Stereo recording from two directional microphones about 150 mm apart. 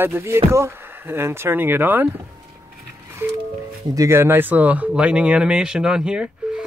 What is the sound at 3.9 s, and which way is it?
Speech, 20° right (ahead or behind).